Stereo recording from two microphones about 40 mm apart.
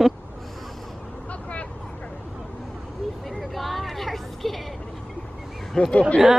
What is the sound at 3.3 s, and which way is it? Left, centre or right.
Vehicle, centre.